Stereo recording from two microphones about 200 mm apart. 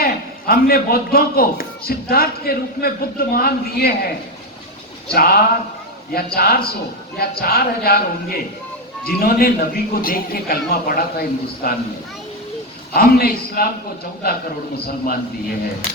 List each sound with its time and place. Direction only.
0.0 s speech: 50° left (ahead or behind)
5.1 s speech: 50° left (ahead or behind)
12.9 s speech: 50° left (ahead or behind)